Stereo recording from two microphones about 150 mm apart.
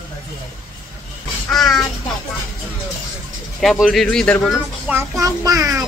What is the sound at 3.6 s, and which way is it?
Speech, centre (ahead or behind).